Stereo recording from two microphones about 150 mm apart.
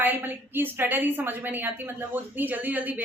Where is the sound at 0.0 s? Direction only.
10° right (ahead or behind).